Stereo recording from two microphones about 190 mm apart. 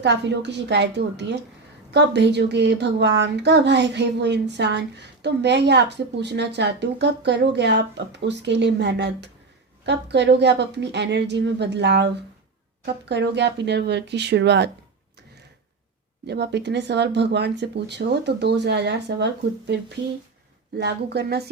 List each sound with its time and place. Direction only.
0.0 s speech: 65° right (ahead or behind)
16.2 s speech: 60° right (ahead or behind)